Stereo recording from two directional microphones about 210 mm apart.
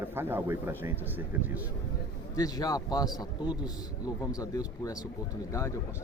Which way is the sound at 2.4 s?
20° left (ahead or behind).